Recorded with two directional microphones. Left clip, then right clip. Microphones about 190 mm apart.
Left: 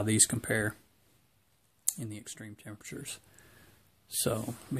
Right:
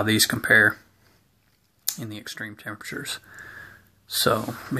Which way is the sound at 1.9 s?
35° left (ahead or behind).